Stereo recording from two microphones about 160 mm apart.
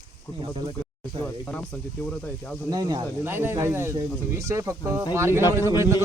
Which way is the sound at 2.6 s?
25° right (ahead or behind).